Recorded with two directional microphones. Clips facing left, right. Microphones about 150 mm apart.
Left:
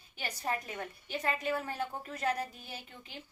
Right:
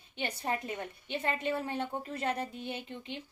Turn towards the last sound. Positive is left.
turn(degrees=-25)  # may be behind; listen again after turning